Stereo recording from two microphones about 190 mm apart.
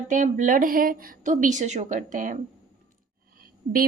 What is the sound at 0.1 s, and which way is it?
Speech, 40° right (ahead or behind).